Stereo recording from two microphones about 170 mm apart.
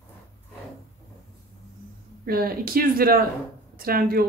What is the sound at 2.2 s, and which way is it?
A woman's voice, 60° right (ahead or behind).